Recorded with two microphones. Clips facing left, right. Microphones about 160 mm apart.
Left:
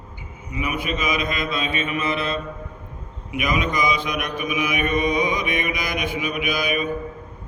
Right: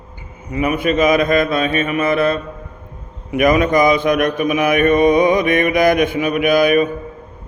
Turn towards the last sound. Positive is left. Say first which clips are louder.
# right 11 dB
turn(degrees=-55)  # may be behind; listen again after turning